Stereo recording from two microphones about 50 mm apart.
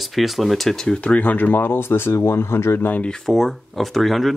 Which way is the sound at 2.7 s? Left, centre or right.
Left.